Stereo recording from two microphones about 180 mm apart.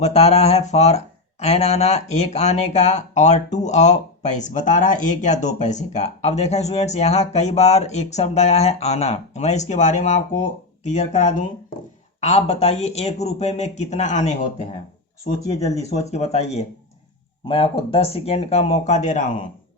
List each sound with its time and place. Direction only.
0.0 s speech: 35° left (ahead or behind)
15.6 s speech: 35° right (ahead or behind)
16.0 s speech: 40° left (ahead or behind)